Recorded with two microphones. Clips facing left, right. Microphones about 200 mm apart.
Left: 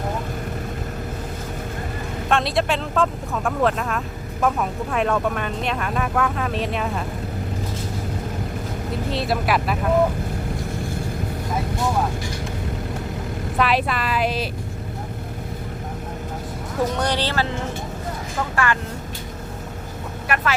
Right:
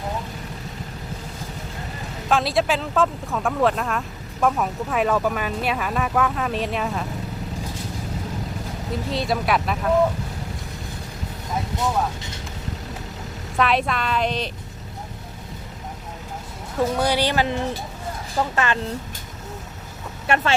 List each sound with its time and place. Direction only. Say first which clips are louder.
2.3 s speech: right 1 dB; centre (ahead or behind)
9.1 s speech: even; centre (ahead or behind)
13.6 s speech: even; centre (ahead or behind)
17.0 s speech: right 2 dB; 10° right (ahead or behind)
18.5 s speech: left 3 dB; 20° right (ahead or behind)
20.2 s speech: right 3 dB; 25° right (ahead or behind)